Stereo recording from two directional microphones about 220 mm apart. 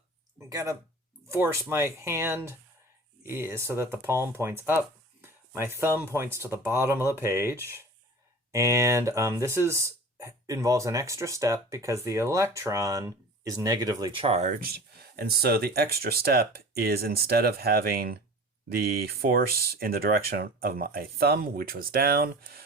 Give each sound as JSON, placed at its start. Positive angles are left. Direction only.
{"t": 0.3, "sound": "speech", "side_deg": -15}